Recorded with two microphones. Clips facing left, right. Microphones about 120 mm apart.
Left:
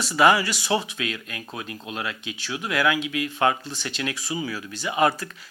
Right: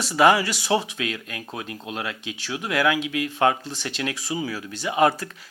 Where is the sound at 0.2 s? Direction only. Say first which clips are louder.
Right 1 dB; 50° right (ahead or behind).